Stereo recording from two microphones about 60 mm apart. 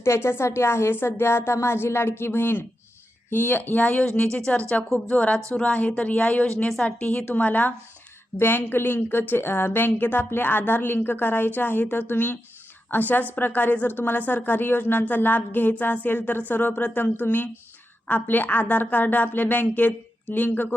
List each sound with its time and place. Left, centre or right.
0.0 s a woman's voice: left